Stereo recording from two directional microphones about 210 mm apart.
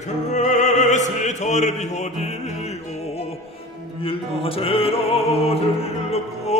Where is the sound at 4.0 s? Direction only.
25° left (ahead or behind).